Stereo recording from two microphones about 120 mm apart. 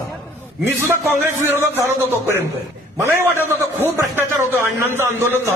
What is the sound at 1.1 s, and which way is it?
Speech, 15° right (ahead or behind).